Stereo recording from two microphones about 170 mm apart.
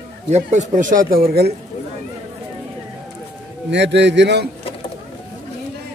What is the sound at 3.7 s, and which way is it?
Speech, 90° right.